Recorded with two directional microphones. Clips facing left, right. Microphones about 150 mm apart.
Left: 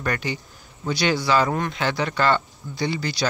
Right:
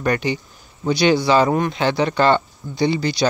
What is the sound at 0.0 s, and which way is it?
Speech, 20° right (ahead or behind).